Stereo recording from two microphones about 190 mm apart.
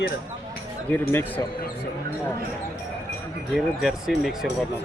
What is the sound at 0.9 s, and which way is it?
Speech, 10° left (ahead or behind).